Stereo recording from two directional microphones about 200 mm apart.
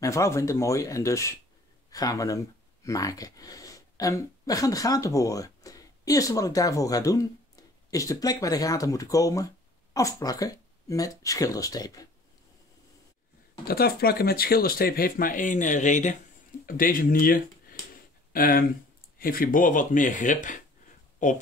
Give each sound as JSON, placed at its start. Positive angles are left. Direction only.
{"t": 0.0, "sound": "speech", "side_deg": 15}
{"t": 13.7, "sound": "speech", "side_deg": 50}